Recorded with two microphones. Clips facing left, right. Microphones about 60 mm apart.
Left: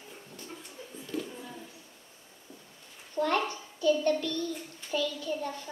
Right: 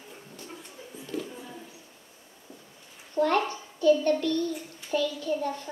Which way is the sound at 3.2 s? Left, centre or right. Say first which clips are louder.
Right 4 dB; centre.